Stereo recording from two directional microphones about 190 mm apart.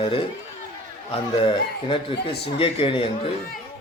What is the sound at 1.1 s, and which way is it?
A man's voice, 30° left (ahead or behind).